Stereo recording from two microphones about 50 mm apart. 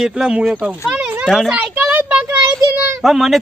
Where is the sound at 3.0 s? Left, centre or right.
Centre.